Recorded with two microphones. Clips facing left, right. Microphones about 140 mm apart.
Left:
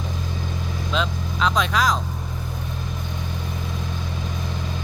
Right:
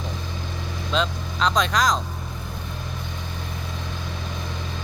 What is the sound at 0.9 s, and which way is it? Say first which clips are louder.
Speech: right 1 dB; 5° left (ahead or behind).